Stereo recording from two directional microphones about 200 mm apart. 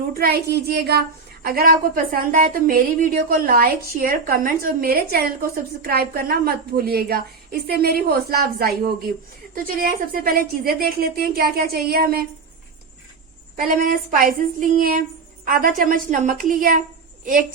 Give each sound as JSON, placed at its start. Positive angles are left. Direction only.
{"t": 0.1, "sound": "a woman's voice", "side_deg": -50}
{"t": 13.6, "sound": "a woman's voice", "side_deg": -45}